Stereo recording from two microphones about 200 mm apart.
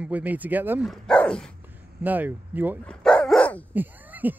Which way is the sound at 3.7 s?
10° right (ahead or behind).